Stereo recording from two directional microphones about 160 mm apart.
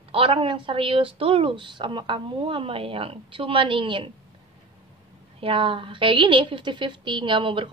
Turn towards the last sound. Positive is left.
turn(degrees=-35)  # may be behind; listen again after turning